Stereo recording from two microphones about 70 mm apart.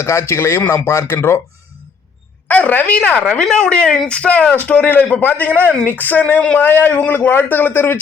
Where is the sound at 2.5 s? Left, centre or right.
Left.